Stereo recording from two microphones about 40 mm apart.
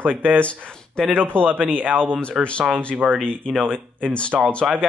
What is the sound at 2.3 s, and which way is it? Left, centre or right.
Speech, centre.